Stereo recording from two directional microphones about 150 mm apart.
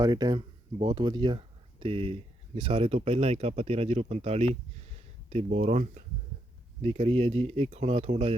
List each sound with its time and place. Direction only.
0.0 s speech: 25° right (ahead or behind); by 8.4 s 45° right (ahead or behind)